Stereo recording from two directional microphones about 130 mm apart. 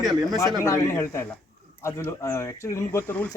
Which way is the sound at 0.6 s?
20° left (ahead or behind).